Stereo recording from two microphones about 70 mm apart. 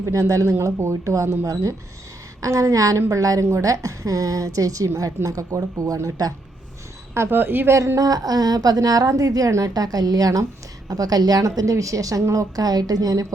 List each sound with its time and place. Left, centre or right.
0.0 s a woman's voice: right
2.4 s a woman's voice: right
7.1 s speech: right
7.9 s a woman's voice: right